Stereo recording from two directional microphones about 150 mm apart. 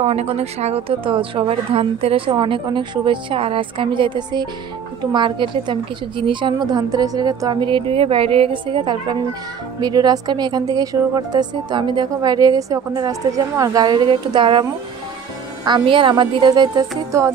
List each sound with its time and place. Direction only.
0.0 s a woman's voice: 45° right (ahead or behind)